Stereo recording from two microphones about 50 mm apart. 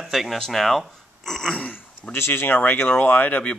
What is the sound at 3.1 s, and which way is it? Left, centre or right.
Speech, left.